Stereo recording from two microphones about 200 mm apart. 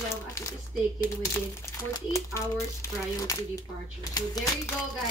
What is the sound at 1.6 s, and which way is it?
Speech, 15° left (ahead or behind).